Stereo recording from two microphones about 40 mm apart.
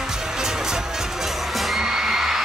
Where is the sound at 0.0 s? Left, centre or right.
Centre.